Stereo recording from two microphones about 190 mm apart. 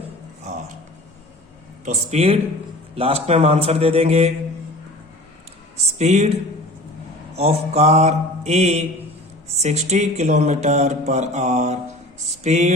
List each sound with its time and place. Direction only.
1.8 s speech: 35° right (ahead or behind)
6.0 s speech: 35° right (ahead or behind)
7.3 s speech: 35° right (ahead or behind)